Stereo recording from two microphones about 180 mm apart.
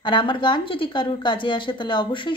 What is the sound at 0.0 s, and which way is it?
Speech, 25° left (ahead or behind).